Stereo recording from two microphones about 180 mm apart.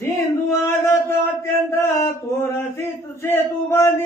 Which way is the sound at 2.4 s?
15° left (ahead or behind).